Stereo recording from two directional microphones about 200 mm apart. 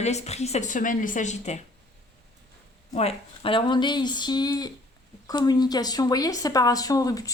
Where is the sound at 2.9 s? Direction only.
30° left (ahead or behind).